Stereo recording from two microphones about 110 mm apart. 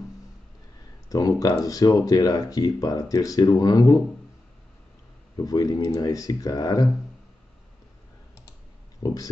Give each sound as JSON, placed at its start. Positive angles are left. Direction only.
{"t": 1.0, "sound": "speech", "side_deg": 35}
{"t": 5.4, "sound": "speech", "side_deg": 35}
{"t": 9.0, "sound": "speech", "side_deg": 35}